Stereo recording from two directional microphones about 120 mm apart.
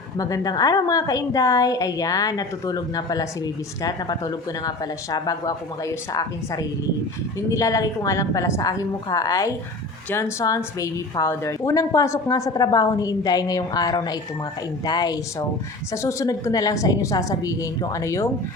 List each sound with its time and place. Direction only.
0.2 s a woman's voice: 30° left (ahead or behind)